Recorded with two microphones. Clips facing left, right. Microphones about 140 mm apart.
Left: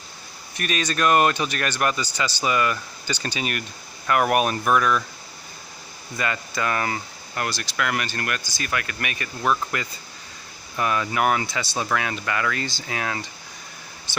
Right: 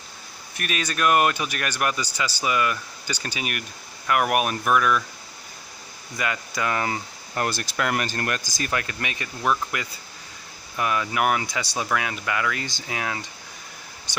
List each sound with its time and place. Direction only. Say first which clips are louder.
0.6 s speech: left 2 dB; 10° right (ahead or behind)
6.1 s speech: left 1 dB; 10° right (ahead or behind)
7.4 s speech: right 1 dB; 30° right (ahead or behind); by 13.3 s 15° right (ahead or behind)